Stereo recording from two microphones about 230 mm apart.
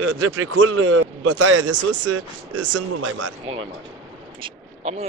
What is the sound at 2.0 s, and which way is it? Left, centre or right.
Speech, right.